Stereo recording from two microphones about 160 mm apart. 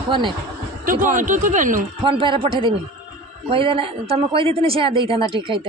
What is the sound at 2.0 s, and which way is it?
A man's voice, 35° right (ahead or behind).